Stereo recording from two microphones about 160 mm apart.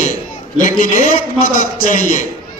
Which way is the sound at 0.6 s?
55° left (ahead or behind).